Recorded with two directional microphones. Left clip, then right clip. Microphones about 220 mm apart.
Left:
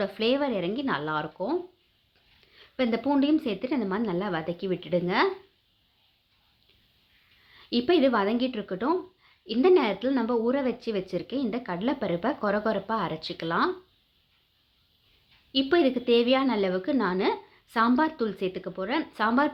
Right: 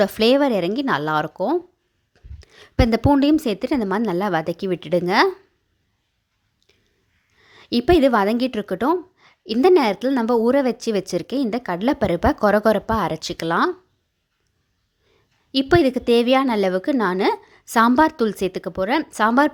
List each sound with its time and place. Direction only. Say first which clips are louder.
0.0 s a woman's voice: right 10 dB; 45° right (ahead or behind)
7.5 s a woman's voice: right 7 dB; 45° right (ahead or behind)
15.5 s a woman's voice: right 6 dB; 45° right (ahead or behind)